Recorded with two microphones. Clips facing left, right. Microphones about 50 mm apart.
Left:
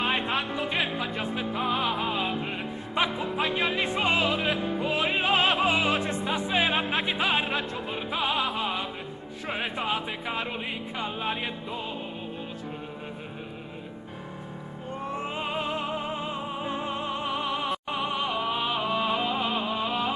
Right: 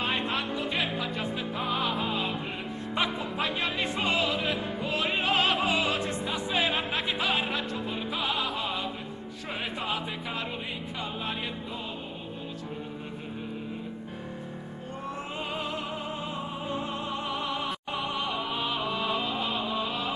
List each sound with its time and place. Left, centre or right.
0.0 s music: centre
15.3 s music: left
18.6 s music: left